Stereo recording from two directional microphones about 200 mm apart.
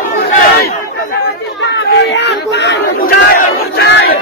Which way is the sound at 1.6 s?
60° left (ahead or behind).